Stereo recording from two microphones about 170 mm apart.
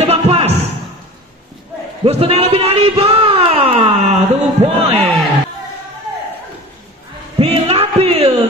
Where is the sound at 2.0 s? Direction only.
35° right (ahead or behind).